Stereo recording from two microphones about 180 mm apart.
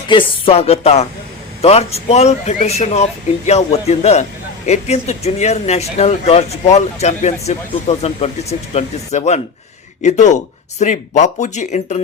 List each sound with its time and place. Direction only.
0.1 s speech: 30° left (ahead or behind)